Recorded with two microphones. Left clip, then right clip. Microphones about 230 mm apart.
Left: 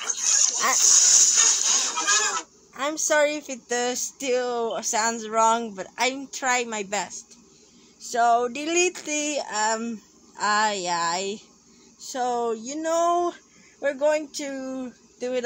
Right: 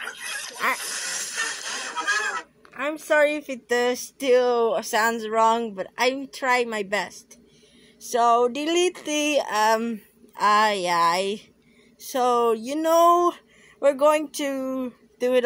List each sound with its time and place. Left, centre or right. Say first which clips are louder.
0.0 s dog: left 8 dB; centre
0.7 s music: left 12 dB; centre
2.7 s speech: right 1 dB; centre
8.1 s a sound: right 2 dB; right
12.0 s speech: right 5 dB; right